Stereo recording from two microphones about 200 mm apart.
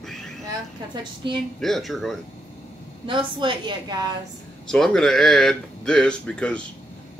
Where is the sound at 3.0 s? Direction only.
25° right (ahead or behind).